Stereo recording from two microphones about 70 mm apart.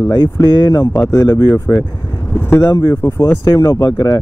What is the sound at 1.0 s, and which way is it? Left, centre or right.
Speech, left.